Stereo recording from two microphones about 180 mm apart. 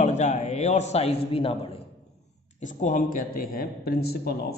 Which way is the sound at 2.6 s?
45° left (ahead or behind).